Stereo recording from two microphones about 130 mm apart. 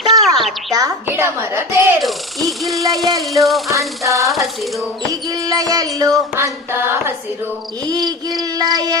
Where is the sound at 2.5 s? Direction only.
Centre (ahead or behind).